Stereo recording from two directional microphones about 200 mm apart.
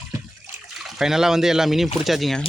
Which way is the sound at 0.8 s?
Centre (ahead or behind).